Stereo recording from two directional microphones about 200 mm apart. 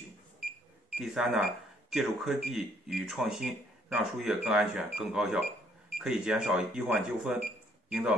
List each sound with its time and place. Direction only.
0.9 s speech: 5° right (ahead or behind)